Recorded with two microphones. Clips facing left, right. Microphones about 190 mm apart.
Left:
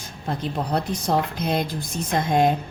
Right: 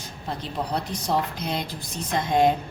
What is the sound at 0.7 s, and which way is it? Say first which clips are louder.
Speech: left 3 dB; 50° left (ahead or behind).